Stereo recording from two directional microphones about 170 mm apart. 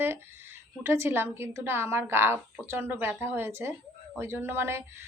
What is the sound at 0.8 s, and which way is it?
A woman's voice, 15° right (ahead or behind).